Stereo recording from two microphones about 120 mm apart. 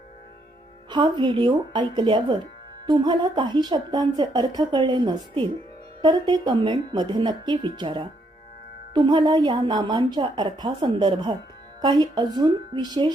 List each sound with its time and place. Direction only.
0.9 s a woman's voice: 40° right (ahead or behind)